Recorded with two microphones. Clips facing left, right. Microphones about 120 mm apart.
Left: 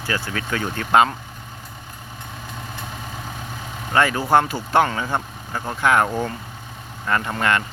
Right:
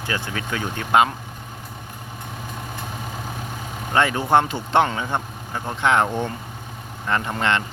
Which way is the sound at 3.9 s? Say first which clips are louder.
Left 1 dB; 20° right (ahead or behind).